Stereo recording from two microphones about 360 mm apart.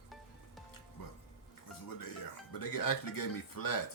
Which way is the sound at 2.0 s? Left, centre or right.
Left.